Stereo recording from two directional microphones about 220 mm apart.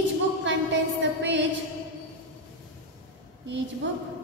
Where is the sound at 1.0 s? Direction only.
55° right (ahead or behind).